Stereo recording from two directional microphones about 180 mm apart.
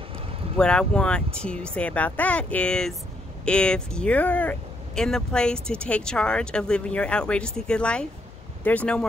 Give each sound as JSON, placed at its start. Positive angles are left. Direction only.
{"t": 0.6, "sound": "speech", "side_deg": 5}